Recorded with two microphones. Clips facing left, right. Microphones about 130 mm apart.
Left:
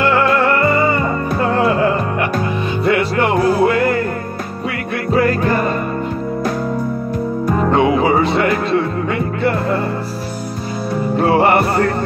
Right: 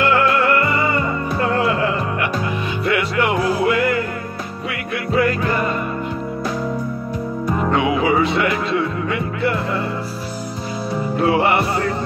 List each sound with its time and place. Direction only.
0.0 s music: 40° left (ahead or behind)
2.8 s music: 35° left (ahead or behind)
7.7 s music: 40° left (ahead or behind)
11.1 s music: 45° left (ahead or behind)